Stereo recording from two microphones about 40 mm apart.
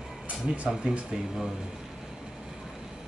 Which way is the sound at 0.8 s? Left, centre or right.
Right.